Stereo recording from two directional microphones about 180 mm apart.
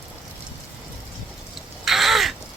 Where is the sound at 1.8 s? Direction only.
Centre (ahead or behind).